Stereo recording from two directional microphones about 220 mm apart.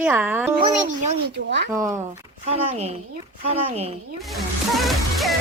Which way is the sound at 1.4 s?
50° right (ahead or behind).